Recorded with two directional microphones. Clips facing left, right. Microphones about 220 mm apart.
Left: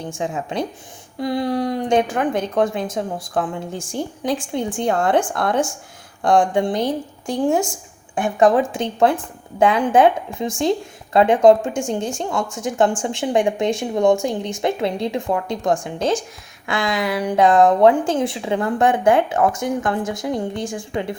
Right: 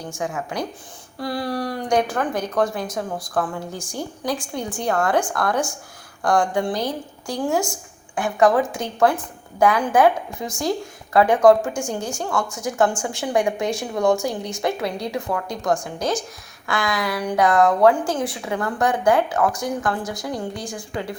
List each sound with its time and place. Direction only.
0.2 s a woman's voice: 25° left (ahead or behind)